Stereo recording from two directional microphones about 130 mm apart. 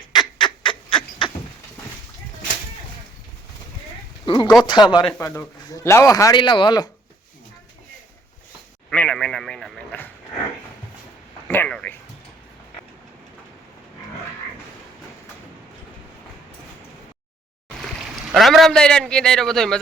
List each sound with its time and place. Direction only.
0.1 s duck: 35° left (ahead or behind)
4.3 s speech: 35° left (ahead or behind)
5.7 s speech: 25° left (ahead or behind)
6.4 s speech: 40° left (ahead or behind)
8.9 s speech: 5° left (ahead or behind)
11.4 s speech: 15° left (ahead or behind)
17.8 s a man's voice: centre (ahead or behind)